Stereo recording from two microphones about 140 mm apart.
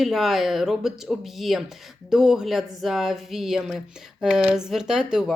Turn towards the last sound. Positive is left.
turn(degrees=-5)  # may be behind; listen again after turning